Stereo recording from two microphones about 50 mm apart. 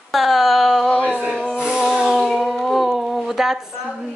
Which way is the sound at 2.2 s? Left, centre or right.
Centre.